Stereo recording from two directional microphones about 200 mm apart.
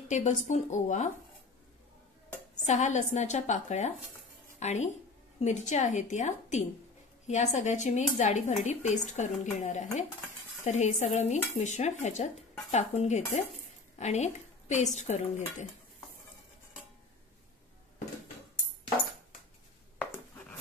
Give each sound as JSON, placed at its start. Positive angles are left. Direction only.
{"t": 0.1, "sound": "a woman's voice", "side_deg": 35}
{"t": 2.6, "sound": "a woman's voice", "side_deg": 35}
{"t": 20.0, "sound": "a sound", "side_deg": 10}